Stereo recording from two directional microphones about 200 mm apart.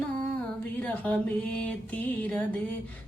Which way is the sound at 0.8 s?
5° left (ahead or behind).